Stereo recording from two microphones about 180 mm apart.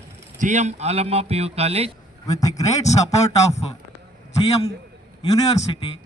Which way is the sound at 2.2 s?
20° left (ahead or behind).